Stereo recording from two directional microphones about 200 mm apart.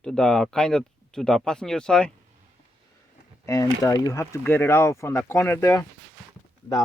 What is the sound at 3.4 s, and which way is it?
Speech, 15° left (ahead or behind).